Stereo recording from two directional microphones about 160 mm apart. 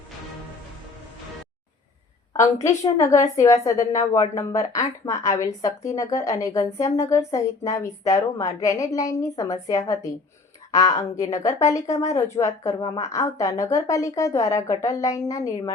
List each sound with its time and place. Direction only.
2.3 s a woman's voice: 20° left (ahead or behind)